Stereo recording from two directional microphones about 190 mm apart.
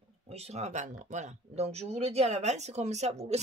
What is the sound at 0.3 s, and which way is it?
A woman's voice, 35° right (ahead or behind).